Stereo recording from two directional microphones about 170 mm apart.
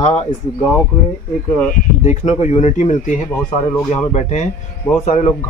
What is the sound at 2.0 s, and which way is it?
Speech, 40° left (ahead or behind).